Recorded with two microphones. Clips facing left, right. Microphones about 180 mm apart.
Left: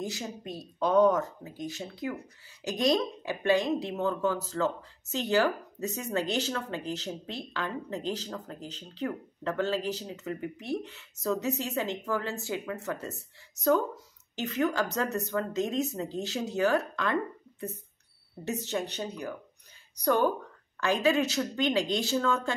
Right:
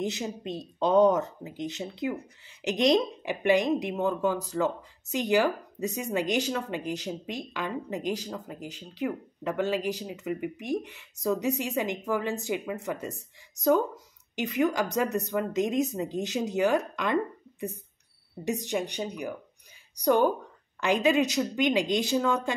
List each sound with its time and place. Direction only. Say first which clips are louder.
0.0 s a woman's voice: right 4 dB; 20° right (ahead or behind)